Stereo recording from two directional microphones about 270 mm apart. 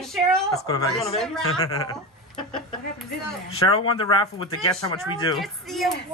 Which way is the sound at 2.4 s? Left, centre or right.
Centre.